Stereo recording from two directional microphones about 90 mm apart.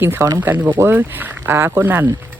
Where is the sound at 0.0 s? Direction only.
25° right (ahead or behind).